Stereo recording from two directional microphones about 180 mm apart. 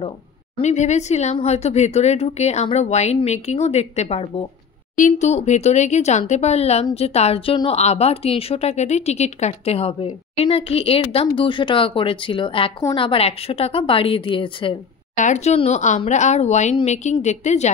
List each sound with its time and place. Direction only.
0.6 s a woman's voice: 40° left (ahead or behind)
15.1 s speech: 40° left (ahead or behind)